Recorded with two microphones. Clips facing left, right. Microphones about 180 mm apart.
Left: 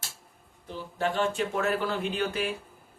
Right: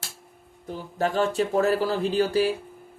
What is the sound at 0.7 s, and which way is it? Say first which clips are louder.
Speech: right 3 dB; 40° right (ahead or behind).